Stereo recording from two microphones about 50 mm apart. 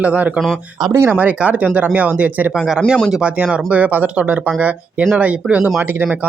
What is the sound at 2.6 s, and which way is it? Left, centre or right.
Speech, centre.